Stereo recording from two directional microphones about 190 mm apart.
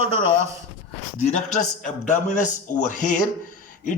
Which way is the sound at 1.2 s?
35° left (ahead or behind).